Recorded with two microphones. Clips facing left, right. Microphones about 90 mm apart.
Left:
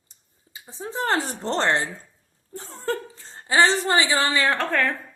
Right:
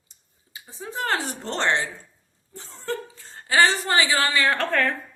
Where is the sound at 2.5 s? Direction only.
50° left (ahead or behind).